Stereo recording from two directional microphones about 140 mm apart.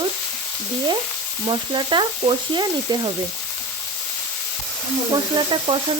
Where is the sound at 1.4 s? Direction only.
35° right (ahead or behind).